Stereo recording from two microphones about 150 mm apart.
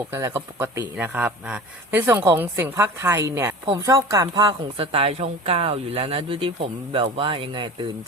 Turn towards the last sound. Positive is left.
turn(degrees=-30)  # may be behind; listen again after turning